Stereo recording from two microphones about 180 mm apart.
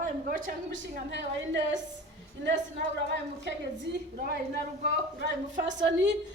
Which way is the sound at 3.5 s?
80° right.